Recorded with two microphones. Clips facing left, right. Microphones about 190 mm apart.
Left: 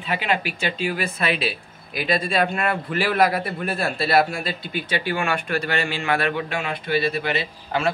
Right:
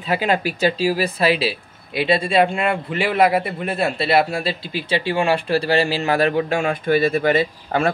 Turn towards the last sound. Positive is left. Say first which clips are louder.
# right 6 dB
turn(degrees=-50)  # may be behind; listen again after turning